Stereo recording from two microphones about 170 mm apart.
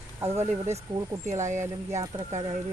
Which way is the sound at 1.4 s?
45° right (ahead or behind).